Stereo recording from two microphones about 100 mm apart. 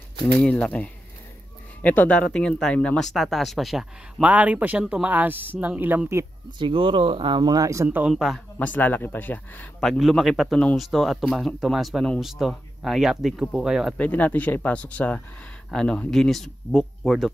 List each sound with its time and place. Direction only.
0.4 s speech: 10° left (ahead or behind)
4.2 s speech: 15° right (ahead or behind)
6.6 s speech: 65° right (ahead or behind)
7.4 s speech: 35° right (ahead or behind)
8.1 s speech: centre (ahead or behind)
8.5 s speech: 15° left (ahead or behind)
9.8 s speech: centre (ahead or behind)
13.9 s speech: 15° left (ahead or behind); by 17.3 s centre (ahead or behind)